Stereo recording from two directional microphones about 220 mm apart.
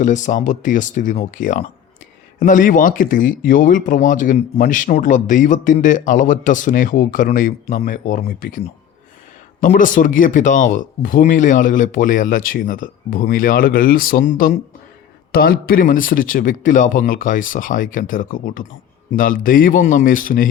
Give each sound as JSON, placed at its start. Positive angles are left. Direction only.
{"t": 0.0, "sound": "speech", "side_deg": 35}